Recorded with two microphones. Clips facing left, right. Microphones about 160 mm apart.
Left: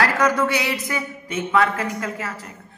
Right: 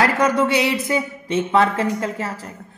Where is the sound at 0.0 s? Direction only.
25° right (ahead or behind).